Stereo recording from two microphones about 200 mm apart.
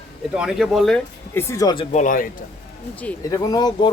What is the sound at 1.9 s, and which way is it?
Speech, 40° left (ahead or behind).